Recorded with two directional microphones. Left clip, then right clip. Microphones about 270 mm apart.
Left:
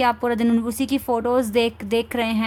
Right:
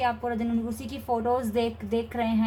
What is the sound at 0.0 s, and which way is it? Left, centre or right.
Speech, left.